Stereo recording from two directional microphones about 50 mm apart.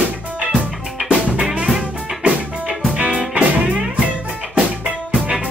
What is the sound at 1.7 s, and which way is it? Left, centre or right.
Music, centre.